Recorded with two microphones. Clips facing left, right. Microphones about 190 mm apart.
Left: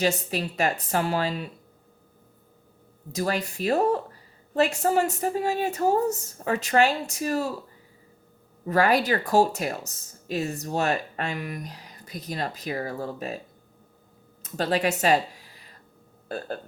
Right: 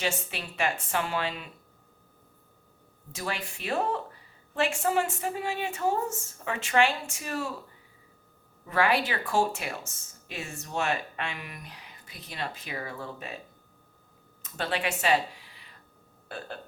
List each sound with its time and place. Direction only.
0.0 s speech: 40° left (ahead or behind)
3.1 s speech: 40° left (ahead or behind)
8.6 s speech: 40° left (ahead or behind)
14.5 s speech: 40° left (ahead or behind)